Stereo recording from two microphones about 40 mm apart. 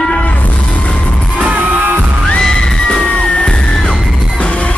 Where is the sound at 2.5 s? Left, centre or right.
Left.